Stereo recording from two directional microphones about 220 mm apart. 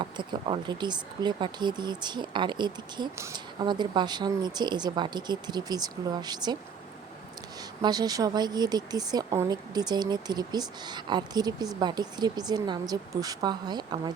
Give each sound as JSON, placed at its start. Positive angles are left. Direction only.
{"t": 0.0, "sound": "speech", "side_deg": -20}
{"t": 7.8, "sound": "speech", "side_deg": -20}